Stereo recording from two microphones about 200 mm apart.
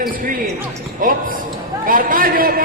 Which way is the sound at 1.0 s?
45° right (ahead or behind).